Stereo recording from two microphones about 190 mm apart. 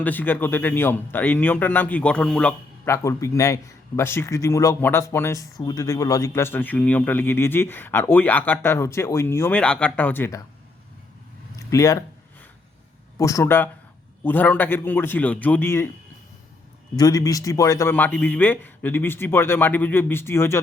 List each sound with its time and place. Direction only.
0.0 s speech: 10° left (ahead or behind)
11.5 s speech: 15° left (ahead or behind)
13.1 s speech: 15° left (ahead or behind)
17.0 s speech: 20° left (ahead or behind)